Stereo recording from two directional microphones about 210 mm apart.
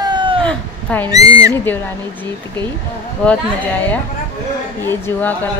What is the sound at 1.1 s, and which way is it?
Speech, 15° right (ahead or behind).